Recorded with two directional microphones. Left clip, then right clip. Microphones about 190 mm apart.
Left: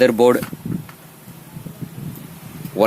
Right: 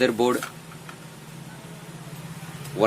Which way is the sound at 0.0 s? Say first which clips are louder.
Left 8 dB; 40° left (ahead or behind).